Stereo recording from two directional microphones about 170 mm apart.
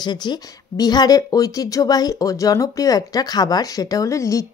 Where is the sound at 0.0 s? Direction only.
25° left (ahead or behind).